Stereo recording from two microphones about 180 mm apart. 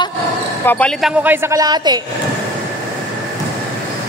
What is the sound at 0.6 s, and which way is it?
Speech, 5° left (ahead or behind).